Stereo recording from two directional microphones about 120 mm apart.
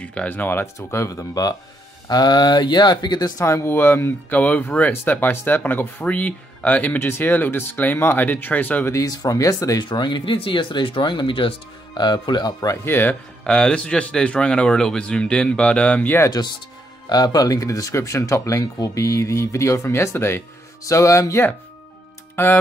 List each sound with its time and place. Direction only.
0.0 s speech: 10° left (ahead or behind)
8.9 s speech: 30° left (ahead or behind)
9.8 s speech: 40° left (ahead or behind); by 16.3 s 15° left (ahead or behind)
17.1 s speech: 35° left (ahead or behind); by 22.6 s 15° left (ahead or behind)